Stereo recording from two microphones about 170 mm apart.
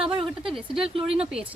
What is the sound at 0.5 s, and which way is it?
Speech, centre (ahead or behind).